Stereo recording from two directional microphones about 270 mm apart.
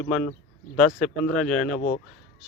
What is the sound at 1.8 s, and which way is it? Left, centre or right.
Speech, left.